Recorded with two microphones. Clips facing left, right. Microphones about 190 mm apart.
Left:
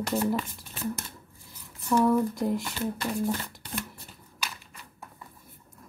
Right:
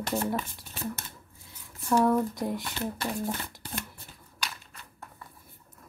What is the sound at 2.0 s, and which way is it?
Speech, centre (ahead or behind).